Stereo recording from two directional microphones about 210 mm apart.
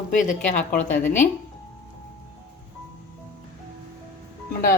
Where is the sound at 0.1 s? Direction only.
35° left (ahead or behind).